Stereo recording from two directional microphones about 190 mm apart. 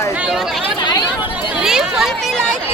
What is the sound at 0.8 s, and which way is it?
Chatter, 20° left (ahead or behind).